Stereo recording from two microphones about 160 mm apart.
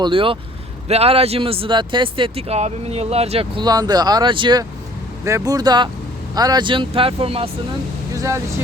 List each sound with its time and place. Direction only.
0.0 s speech: 35° right (ahead or behind)
3.6 s speech: 25° right (ahead or behind)
8.1 s vehicle: 20° right (ahead or behind)